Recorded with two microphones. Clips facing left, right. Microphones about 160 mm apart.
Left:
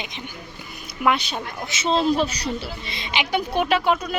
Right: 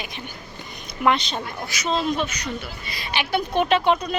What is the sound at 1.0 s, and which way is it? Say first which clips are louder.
Speech: right 1 dB; 5° left (ahead or behind).